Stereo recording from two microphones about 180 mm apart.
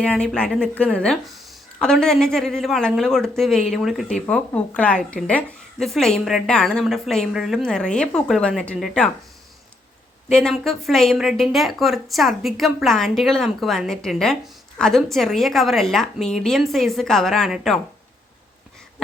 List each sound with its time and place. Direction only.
0.0 s a woman's voice: 5° left (ahead or behind)
10.2 s a woman's voice: 5° left (ahead or behind)